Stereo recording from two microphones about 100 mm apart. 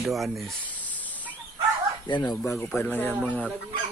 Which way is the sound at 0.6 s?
15° left (ahead or behind).